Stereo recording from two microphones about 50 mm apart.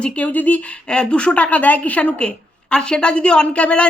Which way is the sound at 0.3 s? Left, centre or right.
Left.